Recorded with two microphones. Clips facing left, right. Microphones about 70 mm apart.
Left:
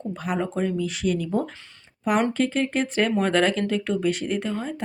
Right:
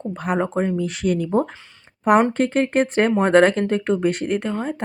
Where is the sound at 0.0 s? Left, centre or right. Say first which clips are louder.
Right 4 dB; right.